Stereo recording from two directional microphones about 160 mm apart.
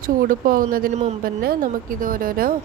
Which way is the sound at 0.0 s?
60° right (ahead or behind).